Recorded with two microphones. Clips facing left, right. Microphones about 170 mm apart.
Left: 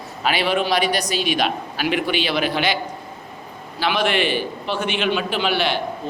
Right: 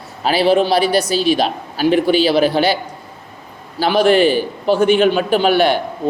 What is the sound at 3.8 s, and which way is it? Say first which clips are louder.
A man's voice: right 8 dB; 35° right (ahead or behind).